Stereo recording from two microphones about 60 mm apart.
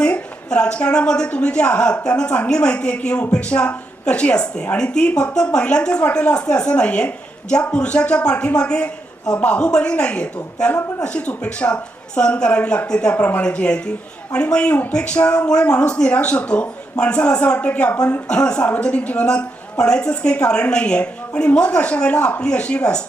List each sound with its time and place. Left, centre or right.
0.0 s a woman's voice: centre